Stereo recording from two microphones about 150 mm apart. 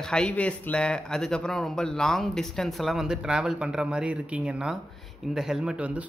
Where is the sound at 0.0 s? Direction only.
5° left (ahead or behind).